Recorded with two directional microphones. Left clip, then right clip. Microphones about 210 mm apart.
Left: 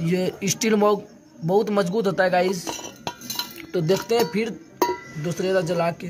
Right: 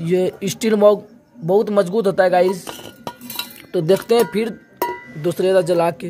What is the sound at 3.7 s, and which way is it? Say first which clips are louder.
Speech: right 6 dB; 35° right (ahead or behind).